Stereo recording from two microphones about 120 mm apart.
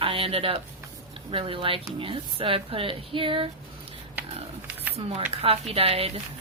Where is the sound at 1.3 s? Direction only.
50° right (ahead or behind).